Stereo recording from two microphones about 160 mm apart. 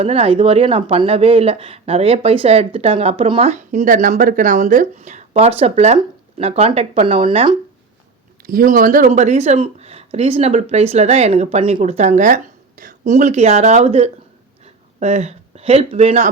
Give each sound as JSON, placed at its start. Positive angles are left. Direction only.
{"t": 0.0, "sound": "speech", "side_deg": -40}
{"t": 8.4, "sound": "speech", "side_deg": -60}